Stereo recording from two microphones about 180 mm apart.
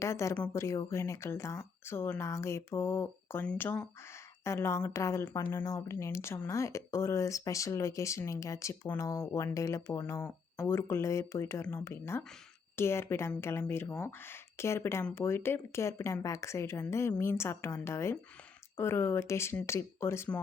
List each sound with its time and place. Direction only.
0.0 s speech: 15° left (ahead or behind)